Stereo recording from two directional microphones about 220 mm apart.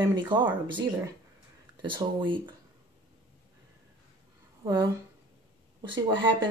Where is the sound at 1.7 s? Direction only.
20° right (ahead or behind).